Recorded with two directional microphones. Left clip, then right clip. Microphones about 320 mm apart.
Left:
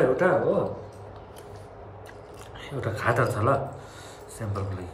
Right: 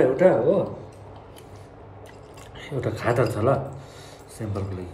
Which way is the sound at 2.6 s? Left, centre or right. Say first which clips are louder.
Right 1 dB; centre.